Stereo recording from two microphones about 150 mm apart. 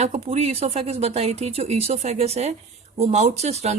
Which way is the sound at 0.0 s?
45° right (ahead or behind).